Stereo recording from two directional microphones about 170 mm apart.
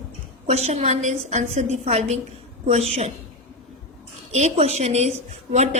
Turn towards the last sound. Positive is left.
turn(degrees=-40)  # may be behind; listen again after turning